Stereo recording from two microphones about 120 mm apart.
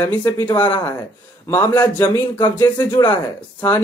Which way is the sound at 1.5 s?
25° left (ahead or behind).